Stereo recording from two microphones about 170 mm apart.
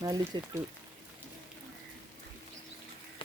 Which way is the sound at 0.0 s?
25° right (ahead or behind).